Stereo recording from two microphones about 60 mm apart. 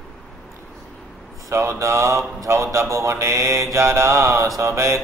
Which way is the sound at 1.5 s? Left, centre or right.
Right.